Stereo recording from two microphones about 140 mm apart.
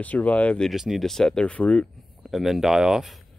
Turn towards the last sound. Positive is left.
turn(degrees=-5)  # may be behind; listen again after turning